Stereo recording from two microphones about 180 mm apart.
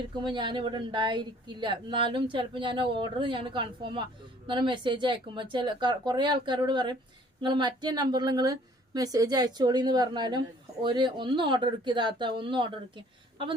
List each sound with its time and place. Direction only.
0.2 s speech: 25° right (ahead or behind)